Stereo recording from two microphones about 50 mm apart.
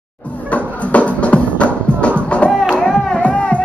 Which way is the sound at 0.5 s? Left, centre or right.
Left.